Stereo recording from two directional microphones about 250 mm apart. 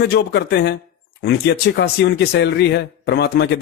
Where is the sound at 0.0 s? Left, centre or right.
Left.